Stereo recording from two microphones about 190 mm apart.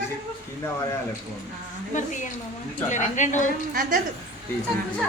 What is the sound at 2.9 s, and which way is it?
Speech, 40° left (ahead or behind).